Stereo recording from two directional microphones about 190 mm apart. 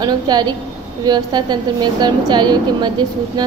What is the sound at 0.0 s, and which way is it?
A woman's voice, 20° right (ahead or behind).